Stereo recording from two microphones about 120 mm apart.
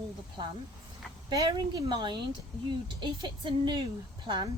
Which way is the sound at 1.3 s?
35° right (ahead or behind).